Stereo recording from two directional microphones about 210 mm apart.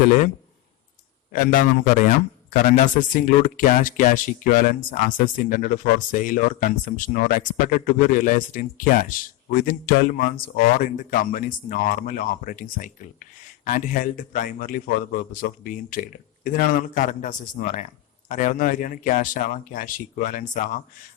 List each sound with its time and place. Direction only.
1.3 s speech: 40° left (ahead or behind)